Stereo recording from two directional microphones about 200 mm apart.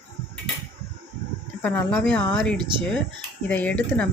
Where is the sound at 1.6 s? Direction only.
5° left (ahead or behind).